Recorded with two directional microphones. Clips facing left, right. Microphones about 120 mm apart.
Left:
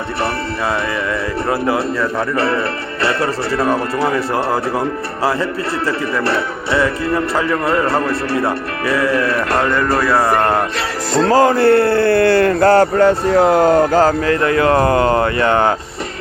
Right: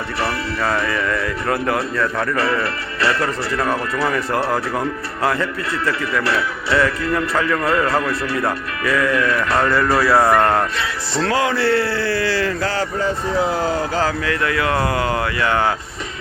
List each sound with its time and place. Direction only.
1.5 s speech: 25° left (ahead or behind)
9.6 s speech: 5° right (ahead or behind)
11.1 s speech: 40° left (ahead or behind)